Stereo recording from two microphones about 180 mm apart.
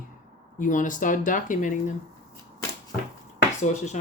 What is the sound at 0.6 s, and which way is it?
Speech, 45° left (ahead or behind).